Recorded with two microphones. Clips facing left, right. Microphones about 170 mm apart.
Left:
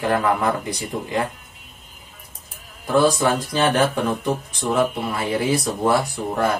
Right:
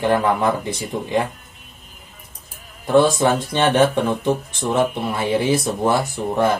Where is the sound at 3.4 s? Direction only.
25° right (ahead or behind).